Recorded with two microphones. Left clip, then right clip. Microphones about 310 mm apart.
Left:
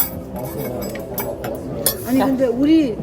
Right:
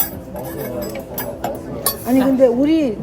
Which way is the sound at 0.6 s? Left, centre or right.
Right.